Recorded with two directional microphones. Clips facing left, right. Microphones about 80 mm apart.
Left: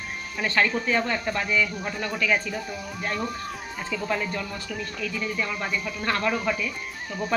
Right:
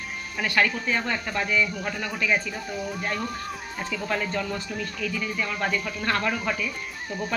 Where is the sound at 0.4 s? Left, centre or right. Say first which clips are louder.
Even; left.